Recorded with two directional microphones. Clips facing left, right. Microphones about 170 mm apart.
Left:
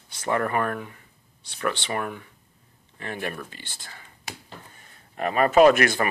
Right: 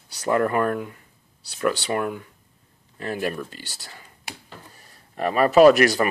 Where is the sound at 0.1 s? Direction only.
40° right (ahead or behind).